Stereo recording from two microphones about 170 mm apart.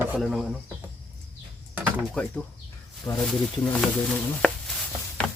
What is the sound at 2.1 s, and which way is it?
Speech, 5° left (ahead or behind).